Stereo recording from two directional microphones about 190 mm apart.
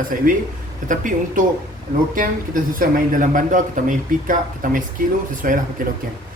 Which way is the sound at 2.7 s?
45° right (ahead or behind).